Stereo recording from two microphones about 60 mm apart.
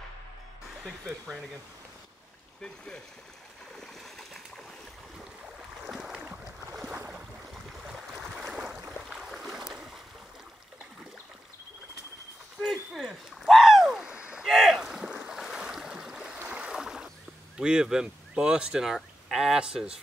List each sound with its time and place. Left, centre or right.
2.6 s speech: centre
3.8 s splash: centre
5.9 s boat: centre
8.2 s boat: centre
12.6 s a sound: centre
14.4 s boat: centre
17.6 s speech: centre